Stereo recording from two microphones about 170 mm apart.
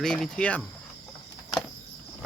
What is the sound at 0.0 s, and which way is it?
Speech, 5° left (ahead or behind).